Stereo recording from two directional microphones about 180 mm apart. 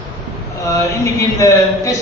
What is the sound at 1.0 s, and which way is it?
Speech, 15° left (ahead or behind).